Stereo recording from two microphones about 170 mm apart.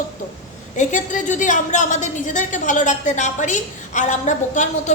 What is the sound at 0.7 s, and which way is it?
A woman's voice, 45° left (ahead or behind).